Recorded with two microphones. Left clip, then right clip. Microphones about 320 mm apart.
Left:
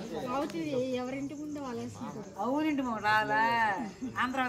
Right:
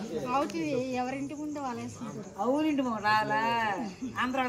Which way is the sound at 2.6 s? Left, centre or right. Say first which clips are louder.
Right 2 dB; centre.